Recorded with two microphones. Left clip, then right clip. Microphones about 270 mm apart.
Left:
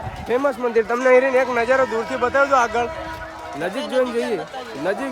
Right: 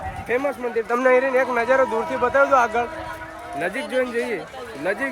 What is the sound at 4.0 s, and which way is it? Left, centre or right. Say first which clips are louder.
Speech: left 3 dB; centre.